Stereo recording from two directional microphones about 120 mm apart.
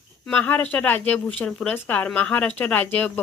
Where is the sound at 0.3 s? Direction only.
15° left (ahead or behind).